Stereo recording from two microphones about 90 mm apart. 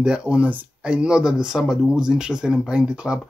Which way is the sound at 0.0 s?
10° right (ahead or behind).